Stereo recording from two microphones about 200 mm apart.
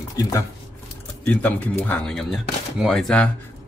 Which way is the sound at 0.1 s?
15° left (ahead or behind).